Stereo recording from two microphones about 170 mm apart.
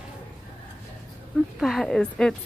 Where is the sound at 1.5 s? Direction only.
5° left (ahead or behind).